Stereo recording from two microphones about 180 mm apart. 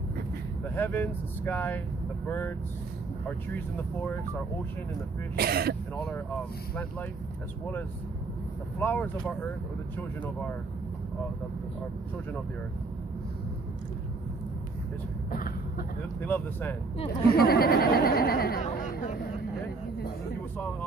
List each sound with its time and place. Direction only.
0.7 s speech: 10° left (ahead or behind)
5.3 s speech: 60° right (ahead or behind)
8.7 s speech: 10° left (ahead or behind)
16.2 s speech: 10° left (ahead or behind)
17.4 s speech: 60° left (ahead or behind)